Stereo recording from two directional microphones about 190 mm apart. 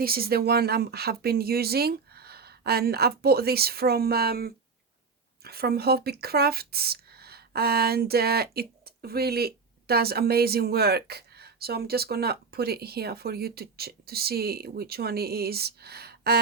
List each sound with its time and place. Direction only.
0.0 s speech: 50° right (ahead or behind)